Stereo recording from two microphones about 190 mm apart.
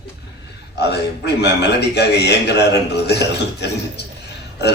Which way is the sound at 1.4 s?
65° left (ahead or behind).